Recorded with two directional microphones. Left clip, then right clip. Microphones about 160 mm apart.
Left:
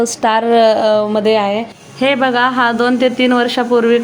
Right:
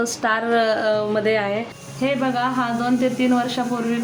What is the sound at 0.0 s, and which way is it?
A woman's voice, 30° left (ahead or behind).